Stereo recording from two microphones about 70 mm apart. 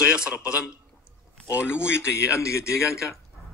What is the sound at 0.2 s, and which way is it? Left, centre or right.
Speech, centre.